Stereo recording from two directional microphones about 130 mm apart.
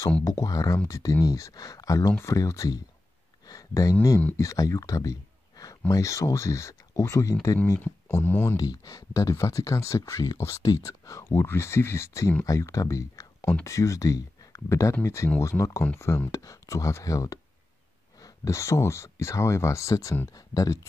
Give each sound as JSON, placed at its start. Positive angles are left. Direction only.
{"t": 0.2, "sound": "speech", "side_deg": 30}
{"t": 3.4, "sound": "a sound", "side_deg": 25}
{"t": 4.4, "sound": "speech", "side_deg": 25}
{"t": 8.5, "sound": "speech", "side_deg": 30}